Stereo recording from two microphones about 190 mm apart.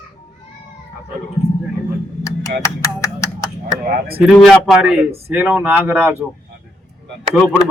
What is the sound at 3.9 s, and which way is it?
Speech, 55° right (ahead or behind).